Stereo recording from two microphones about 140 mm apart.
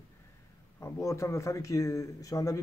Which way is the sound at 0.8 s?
20° left (ahead or behind).